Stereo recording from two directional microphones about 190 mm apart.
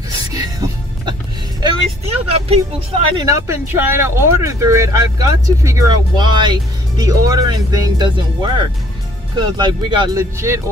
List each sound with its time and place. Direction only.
0.3 s music: 20° right (ahead or behind)
2.0 s speech: 30° right (ahead or behind)
3.3 s speech: 15° right (ahead or behind)